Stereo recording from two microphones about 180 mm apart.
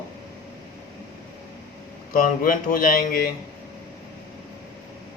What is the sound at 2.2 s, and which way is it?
Speech, 50° left (ahead or behind).